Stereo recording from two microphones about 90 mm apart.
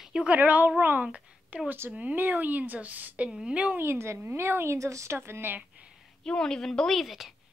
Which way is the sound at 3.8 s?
30° right (ahead or behind).